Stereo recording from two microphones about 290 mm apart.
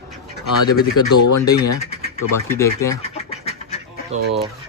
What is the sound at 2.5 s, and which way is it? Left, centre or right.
Speech, centre.